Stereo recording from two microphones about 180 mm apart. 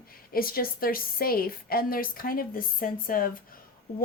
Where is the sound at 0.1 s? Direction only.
55° left (ahead or behind).